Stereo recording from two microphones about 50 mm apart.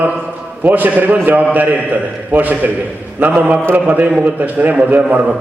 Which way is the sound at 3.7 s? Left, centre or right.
Right.